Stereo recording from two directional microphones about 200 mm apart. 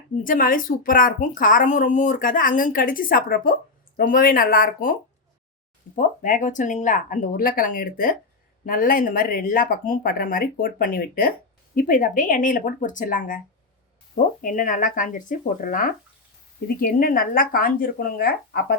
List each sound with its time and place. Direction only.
0.2 s speech: 45° left (ahead or behind)
6.0 s speech: 40° left (ahead or behind)
14.4 s speech: 40° left (ahead or behind)